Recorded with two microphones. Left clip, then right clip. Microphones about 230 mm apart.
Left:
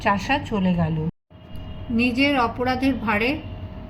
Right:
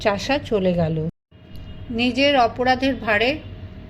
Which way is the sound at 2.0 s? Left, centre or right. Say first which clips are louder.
Right 3 dB; right.